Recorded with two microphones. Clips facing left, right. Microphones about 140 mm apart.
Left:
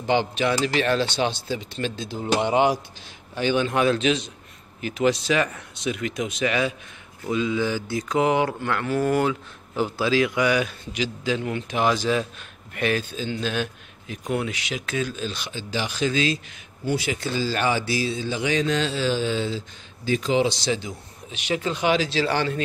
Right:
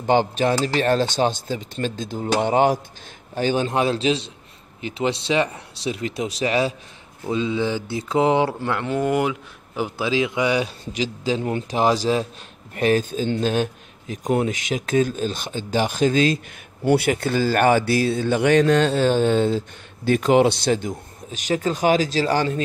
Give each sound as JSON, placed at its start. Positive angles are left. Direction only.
{"t": 0.0, "sound": "speech", "side_deg": -45}
{"t": 7.2, "sound": "mantra", "side_deg": -25}
{"t": 12.7, "sound": "speech", "side_deg": -40}
{"t": 16.8, "sound": "speech", "side_deg": -60}